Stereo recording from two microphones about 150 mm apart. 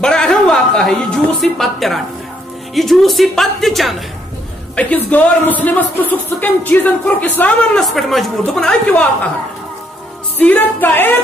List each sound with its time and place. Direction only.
0.0 s a woman's voice: 5° left (ahead or behind)
10.4 s speech: 10° left (ahead or behind)